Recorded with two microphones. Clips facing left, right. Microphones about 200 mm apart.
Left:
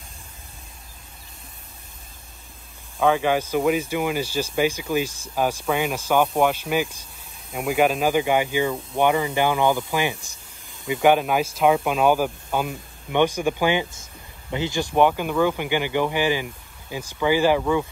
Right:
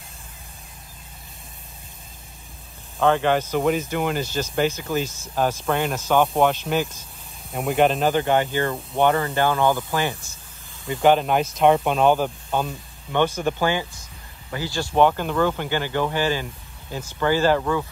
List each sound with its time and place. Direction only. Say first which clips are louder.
3.0 s speech: right 1 dB; 10° left (ahead or behind)